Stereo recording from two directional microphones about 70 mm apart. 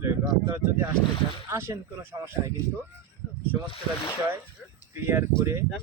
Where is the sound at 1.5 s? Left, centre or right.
Right.